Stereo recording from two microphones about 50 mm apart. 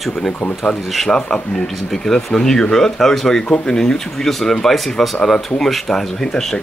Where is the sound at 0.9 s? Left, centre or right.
Centre.